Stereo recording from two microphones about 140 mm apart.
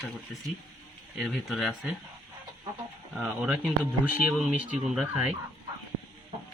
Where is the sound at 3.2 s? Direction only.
Centre (ahead or behind).